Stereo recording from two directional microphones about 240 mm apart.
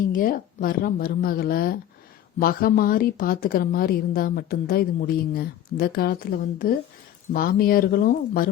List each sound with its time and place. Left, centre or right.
0.0 s a woman's voice: left
7.3 s a woman's voice: left